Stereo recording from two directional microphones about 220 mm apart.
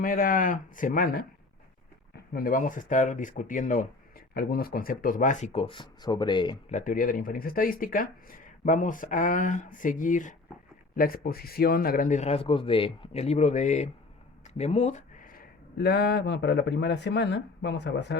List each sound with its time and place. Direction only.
0.0 s speech: 40° left (ahead or behind); by 6.7 s 20° left (ahead or behind)
6.7 s speech: 35° left (ahead or behind)